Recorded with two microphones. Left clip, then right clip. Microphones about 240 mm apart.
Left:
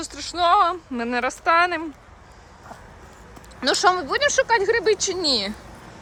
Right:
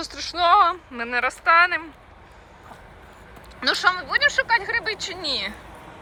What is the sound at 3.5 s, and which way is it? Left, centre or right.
Speech, left.